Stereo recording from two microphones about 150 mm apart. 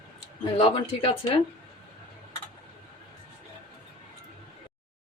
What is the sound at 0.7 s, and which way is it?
Speech, 40° left (ahead or behind).